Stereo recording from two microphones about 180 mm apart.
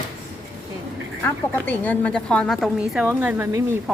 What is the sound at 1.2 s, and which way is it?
A woman's voice, 10° left (ahead or behind).